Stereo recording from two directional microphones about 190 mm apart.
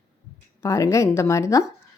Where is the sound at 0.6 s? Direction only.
15° left (ahead or behind).